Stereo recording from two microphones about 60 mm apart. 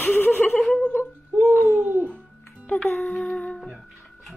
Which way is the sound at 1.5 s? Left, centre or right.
Right.